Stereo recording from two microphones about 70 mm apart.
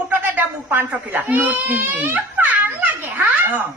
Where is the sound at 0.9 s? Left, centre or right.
Right.